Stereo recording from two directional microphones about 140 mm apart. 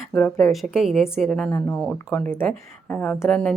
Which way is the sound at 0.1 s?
5° left (ahead or behind).